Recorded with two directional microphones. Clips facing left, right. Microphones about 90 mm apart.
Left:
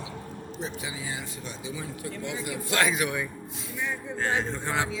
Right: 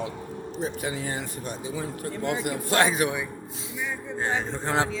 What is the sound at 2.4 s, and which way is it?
Speech, 55° right (ahead or behind).